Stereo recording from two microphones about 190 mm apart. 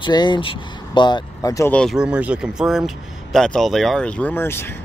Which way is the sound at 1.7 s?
Centre (ahead or behind).